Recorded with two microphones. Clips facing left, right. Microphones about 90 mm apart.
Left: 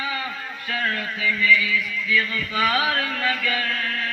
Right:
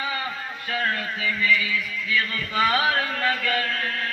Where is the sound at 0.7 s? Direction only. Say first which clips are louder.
Even; 25° right (ahead or behind).